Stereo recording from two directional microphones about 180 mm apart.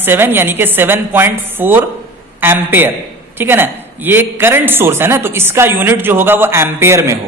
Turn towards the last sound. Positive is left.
turn(degrees=-15)  # may be behind; listen again after turning